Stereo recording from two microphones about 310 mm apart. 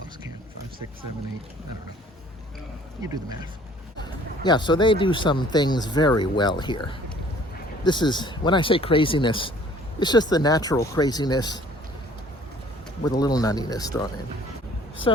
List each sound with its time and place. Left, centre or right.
4.4 s speech: centre
13.1 s speech: centre